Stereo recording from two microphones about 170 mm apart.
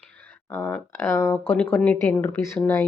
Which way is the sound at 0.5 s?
15° left (ahead or behind).